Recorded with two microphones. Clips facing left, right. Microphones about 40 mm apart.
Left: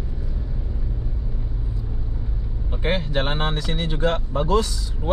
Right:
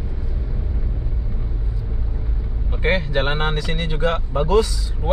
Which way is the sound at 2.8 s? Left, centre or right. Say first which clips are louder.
Right 3 dB; centre.